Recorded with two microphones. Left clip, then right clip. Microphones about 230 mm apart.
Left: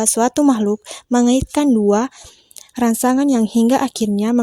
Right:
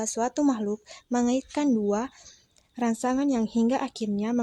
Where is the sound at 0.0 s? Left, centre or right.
Left.